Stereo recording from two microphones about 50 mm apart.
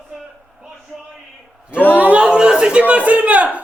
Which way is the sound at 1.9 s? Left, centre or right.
Right.